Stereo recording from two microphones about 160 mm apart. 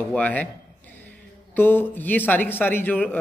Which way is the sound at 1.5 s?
10° left (ahead or behind).